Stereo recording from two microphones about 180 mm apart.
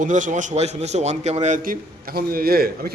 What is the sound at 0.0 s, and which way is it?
A man's voice, 45° right (ahead or behind).